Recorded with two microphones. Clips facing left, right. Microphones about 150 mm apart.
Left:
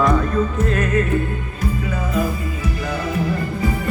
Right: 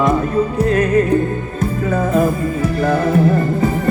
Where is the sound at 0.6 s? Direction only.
35° right (ahead or behind).